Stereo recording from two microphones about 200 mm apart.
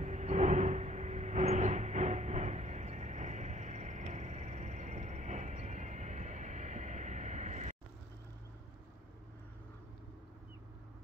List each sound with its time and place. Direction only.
0.0 s vehicle: 35° right (ahead or behind)